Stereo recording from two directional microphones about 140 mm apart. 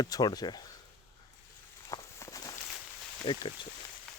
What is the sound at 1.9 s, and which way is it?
Walk, 25° left (ahead or behind).